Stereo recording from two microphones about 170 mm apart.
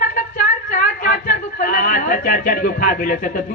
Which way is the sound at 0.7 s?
55° left (ahead or behind).